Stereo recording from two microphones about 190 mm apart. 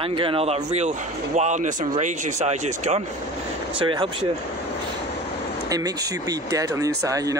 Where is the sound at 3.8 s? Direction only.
25° right (ahead or behind).